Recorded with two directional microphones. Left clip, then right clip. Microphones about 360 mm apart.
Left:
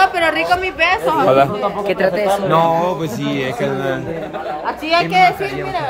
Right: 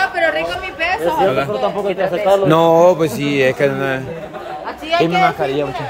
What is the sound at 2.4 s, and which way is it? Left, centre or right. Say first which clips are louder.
Speech: right 6 dB; right.